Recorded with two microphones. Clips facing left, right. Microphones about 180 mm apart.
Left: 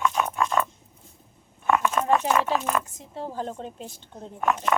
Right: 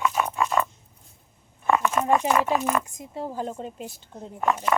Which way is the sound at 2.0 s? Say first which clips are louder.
Right 1 dB; 10° right (ahead or behind).